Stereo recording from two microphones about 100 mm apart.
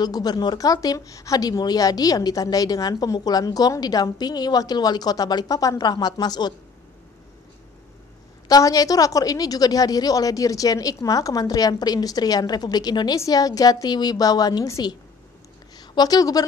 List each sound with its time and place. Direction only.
0.0 s speech: 40° left (ahead or behind)
8.5 s a woman's voice: 40° left (ahead or behind)